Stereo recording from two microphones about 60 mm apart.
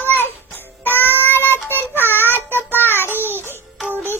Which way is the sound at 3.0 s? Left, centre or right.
Right.